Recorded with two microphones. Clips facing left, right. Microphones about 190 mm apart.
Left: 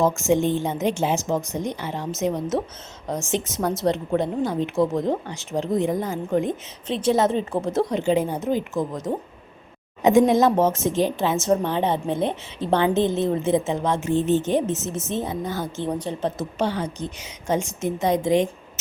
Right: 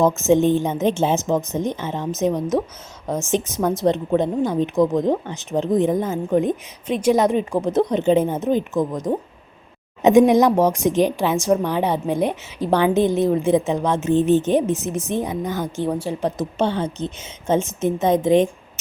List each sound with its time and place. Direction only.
0.0 s a woman's voice: 20° right (ahead or behind)
16.6 s a woman's voice: 25° right (ahead or behind)